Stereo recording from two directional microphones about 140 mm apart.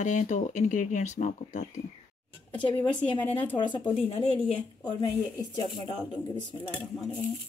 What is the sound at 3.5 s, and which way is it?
Speech, 35° left (ahead or behind).